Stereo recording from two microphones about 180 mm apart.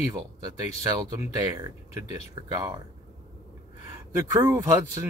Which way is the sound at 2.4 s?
25° right (ahead or behind).